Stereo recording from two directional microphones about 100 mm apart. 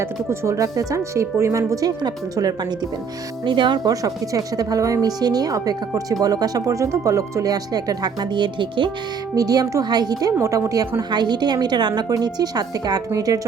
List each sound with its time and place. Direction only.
0.0 s a woman's voice: 25° right (ahead or behind)
3.4 s speech: 50° right (ahead or behind)
4.0 s a woman's voice: 35° right (ahead or behind); by 8.9 s 55° right (ahead or behind)
9.3 s a woman's voice: 40° right (ahead or behind)
10.3 s a woman's voice: 25° right (ahead or behind)